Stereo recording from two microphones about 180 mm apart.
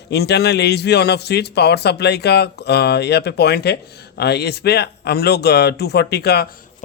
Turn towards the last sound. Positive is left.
turn(degrees=65)  # may be behind; listen again after turning